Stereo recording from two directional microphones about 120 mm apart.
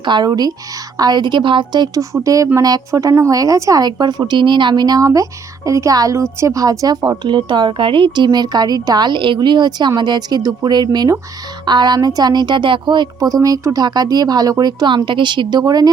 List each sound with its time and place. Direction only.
0.0 s speech: 40° right (ahead or behind)
2.1 s speech: 30° right (ahead or behind)